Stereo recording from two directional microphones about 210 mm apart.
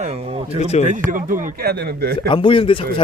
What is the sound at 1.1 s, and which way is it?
Speech, 40° right (ahead or behind).